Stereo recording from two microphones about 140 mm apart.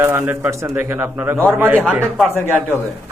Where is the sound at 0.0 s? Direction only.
15° right (ahead or behind).